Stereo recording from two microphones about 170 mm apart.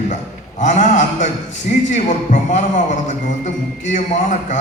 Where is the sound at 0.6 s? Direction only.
45° left (ahead or behind).